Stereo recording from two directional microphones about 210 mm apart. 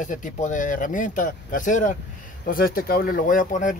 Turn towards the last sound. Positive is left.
turn(degrees=40)  # may be behind; listen again after turning